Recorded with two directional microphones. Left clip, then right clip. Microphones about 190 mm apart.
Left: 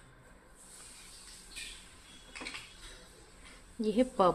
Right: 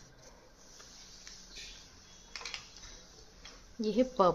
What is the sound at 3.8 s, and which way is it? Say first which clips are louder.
Speech: even; 5° right (ahead or behind).